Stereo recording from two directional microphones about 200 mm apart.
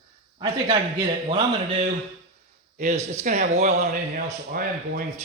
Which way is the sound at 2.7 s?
35° right (ahead or behind).